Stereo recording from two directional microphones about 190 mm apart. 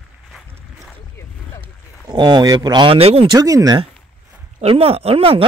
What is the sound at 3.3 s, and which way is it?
A man's voice, 20° right (ahead or behind).